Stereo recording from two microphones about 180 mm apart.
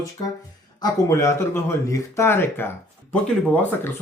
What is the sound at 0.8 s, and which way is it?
Speech, 15° left (ahead or behind).